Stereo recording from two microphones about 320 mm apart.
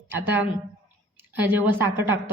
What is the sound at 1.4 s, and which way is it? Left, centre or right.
Speech, centre.